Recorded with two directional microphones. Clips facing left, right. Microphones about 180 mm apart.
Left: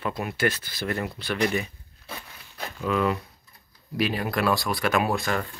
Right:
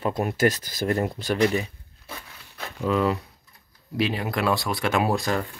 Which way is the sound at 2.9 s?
30° right (ahead or behind).